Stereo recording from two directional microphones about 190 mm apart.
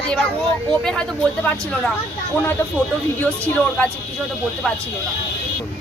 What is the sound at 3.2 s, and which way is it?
Speech, 10° left (ahead or behind).